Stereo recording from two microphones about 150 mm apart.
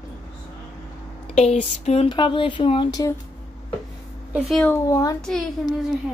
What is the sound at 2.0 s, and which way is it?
Speech, 30° left (ahead or behind).